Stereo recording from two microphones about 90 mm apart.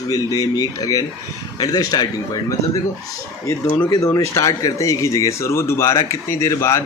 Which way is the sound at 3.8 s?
40° left (ahead or behind).